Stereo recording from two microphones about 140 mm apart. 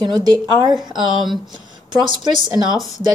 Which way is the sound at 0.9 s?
Centre (ahead or behind).